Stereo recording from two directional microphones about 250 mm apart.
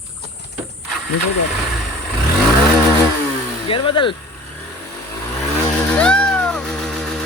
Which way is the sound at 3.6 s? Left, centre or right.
Left.